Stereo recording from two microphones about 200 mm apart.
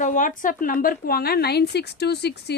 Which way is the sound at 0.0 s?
40° left (ahead or behind).